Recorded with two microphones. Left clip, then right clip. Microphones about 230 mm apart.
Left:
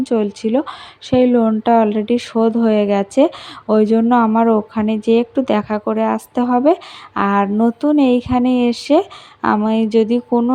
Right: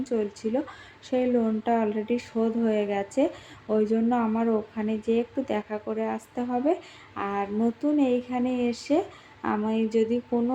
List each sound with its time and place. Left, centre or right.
0.0 s speech: left